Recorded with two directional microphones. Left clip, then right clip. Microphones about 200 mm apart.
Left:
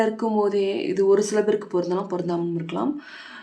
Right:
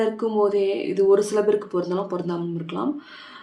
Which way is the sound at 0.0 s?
25° left (ahead or behind).